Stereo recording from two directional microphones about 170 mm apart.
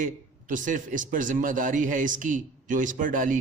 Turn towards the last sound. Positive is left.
turn(degrees=-50)  # may be behind; listen again after turning